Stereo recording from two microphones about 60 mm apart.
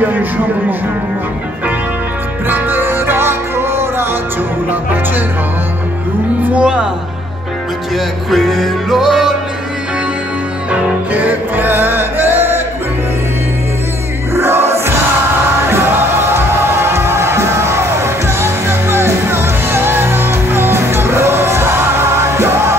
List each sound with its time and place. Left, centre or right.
0.0 s speech: right
2.4 s music: right
6.6 s speech: centre
7.9 s music: centre
10.7 s music: right
14.3 s music: right